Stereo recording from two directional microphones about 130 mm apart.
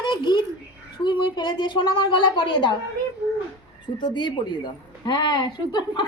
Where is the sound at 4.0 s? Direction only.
35° left (ahead or behind).